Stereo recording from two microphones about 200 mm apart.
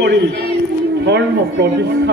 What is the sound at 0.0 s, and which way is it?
A man's voice, 60° right (ahead or behind).